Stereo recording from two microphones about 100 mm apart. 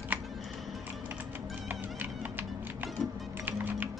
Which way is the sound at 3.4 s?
20° right (ahead or behind).